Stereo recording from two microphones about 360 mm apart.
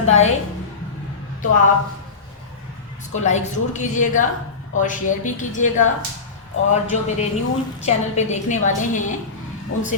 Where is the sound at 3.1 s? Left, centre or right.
Centre.